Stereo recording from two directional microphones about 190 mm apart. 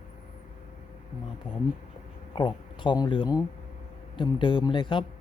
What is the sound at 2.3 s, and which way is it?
Speech, 25° left (ahead or behind).